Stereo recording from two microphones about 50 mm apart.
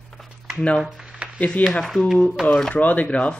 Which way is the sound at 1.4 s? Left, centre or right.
Left.